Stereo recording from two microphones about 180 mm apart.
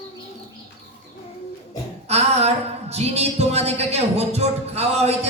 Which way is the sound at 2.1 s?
35° right (ahead or behind).